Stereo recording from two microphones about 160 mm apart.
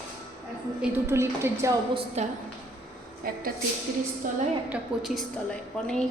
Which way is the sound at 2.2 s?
45° right (ahead or behind).